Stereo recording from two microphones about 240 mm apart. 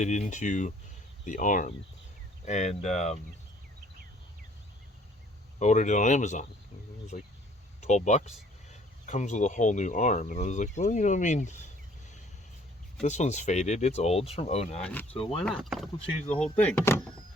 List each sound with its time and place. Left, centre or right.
0.0 s speech: left
5.5 s speech: left
13.0 s speech: left
14.8 s speech: centre
15.1 s speech: left
15.4 s speech: centre